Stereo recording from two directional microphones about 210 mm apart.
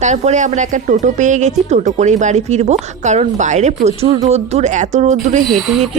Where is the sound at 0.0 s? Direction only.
35° right (ahead or behind).